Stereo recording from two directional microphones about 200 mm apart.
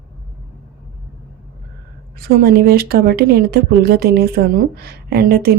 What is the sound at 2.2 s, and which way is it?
A woman's voice, 50° right (ahead or behind).